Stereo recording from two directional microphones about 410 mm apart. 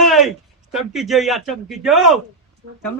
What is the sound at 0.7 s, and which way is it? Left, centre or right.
Speech, centre.